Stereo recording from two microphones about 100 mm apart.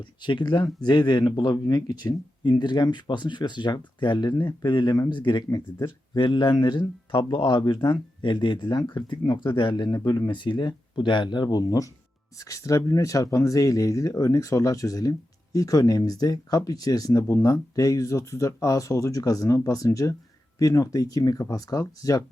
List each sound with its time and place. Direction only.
0.0 s speech: 50° left (ahead or behind); by 22.2 s 35° left (ahead or behind)